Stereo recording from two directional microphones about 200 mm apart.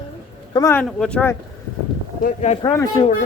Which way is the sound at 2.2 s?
35° left (ahead or behind).